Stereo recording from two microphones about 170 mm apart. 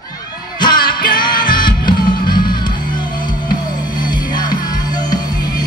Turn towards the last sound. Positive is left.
turn(degrees=25)  # may be behind; listen again after turning